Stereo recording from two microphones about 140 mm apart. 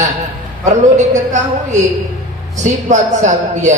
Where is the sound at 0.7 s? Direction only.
60° right (ahead or behind).